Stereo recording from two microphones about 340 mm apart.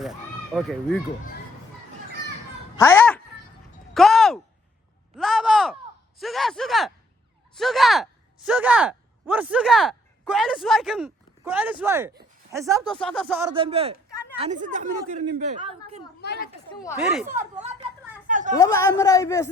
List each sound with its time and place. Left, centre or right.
0.0 s speech: centre
2.7 s cat: centre
3.9 s a sound: centre
8.4 s speech: centre; by 16.0 s right
16.2 s speech: left
16.8 s speech: centre
18.3 s a sound: right
18.5 s a man's voice: centre